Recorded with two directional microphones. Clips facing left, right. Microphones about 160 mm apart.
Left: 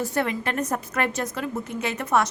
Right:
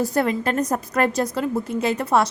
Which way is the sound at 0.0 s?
35° right (ahead or behind).